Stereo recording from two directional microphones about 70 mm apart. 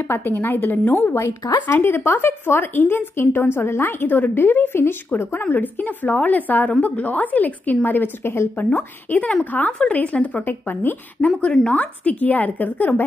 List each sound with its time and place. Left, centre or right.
0.1 s a woman's voice: left
8.7 s a woman's voice: left
11.1 s a woman's voice: centre